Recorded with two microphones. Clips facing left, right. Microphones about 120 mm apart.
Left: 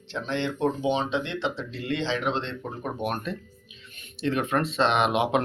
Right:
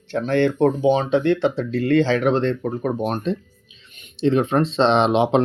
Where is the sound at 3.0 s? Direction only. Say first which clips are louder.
Right 7 dB; 25° right (ahead or behind).